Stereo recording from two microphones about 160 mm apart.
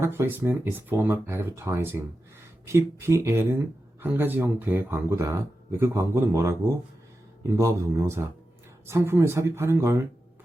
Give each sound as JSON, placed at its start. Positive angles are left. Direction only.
{"t": 0.0, "sound": "speech", "side_deg": -15}